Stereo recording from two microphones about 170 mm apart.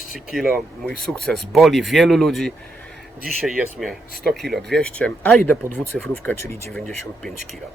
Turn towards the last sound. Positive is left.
turn(degrees=5)  # may be behind; listen again after turning